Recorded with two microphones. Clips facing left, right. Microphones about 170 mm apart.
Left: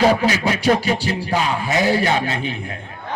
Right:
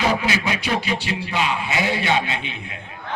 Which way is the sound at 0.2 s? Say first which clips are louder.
Left 4 dB; 35° left (ahead or behind).